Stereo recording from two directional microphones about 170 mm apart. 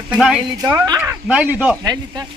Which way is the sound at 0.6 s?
20° right (ahead or behind).